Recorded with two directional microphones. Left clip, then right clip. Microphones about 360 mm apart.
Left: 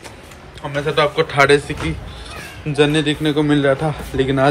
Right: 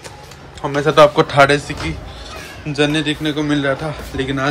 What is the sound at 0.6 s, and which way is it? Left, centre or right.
A man's voice, centre.